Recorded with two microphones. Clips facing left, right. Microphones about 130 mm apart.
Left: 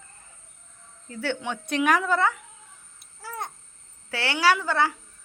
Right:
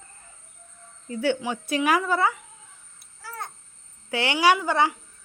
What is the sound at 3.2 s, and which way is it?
Babbling, 20° left (ahead or behind).